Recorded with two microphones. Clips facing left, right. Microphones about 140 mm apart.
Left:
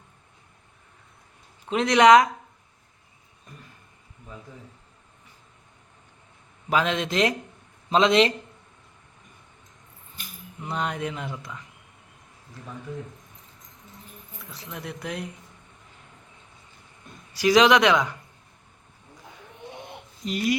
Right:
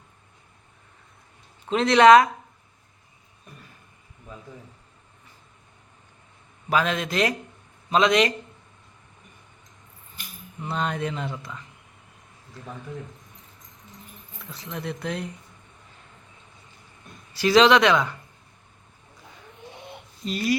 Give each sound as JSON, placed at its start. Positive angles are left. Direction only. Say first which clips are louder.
{"t": 1.7, "sound": "speech", "louder": "right 1 dB", "side_deg": 15}
{"t": 6.7, "sound": "a man's voice", "louder": "even", "side_deg": 20}
{"t": 10.6, "sound": "speech", "louder": "right 1 dB", "side_deg": 10}
{"t": 14.5, "sound": "speech", "louder": "right 4 dB", "side_deg": 5}
{"t": 17.3, "sound": "speech", "louder": "right 1 dB", "side_deg": 10}
{"t": 20.2, "sound": "speech", "louder": "right 1 dB", "side_deg": 20}